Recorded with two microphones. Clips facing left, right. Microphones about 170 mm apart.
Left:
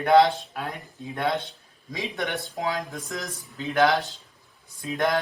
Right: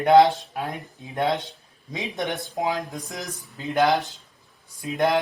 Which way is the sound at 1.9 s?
20° right (ahead or behind).